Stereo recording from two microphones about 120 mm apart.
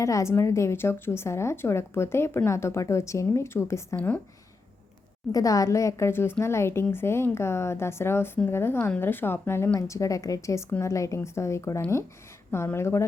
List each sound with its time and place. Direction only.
0.0 s speech: 25° left (ahead or behind)
5.3 s speech: 30° left (ahead or behind)